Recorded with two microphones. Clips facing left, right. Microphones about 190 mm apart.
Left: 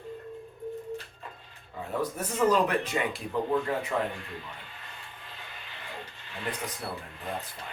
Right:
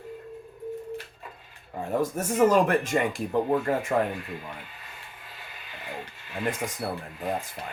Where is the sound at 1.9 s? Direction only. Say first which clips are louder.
Right 5 dB; 45° right (ahead or behind).